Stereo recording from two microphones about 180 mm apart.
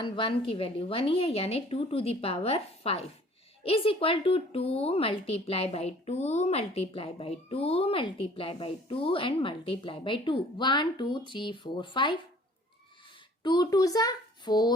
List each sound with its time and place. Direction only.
0.0 s speech: 30° left (ahead or behind)
13.4 s a child's voice: 25° left (ahead or behind)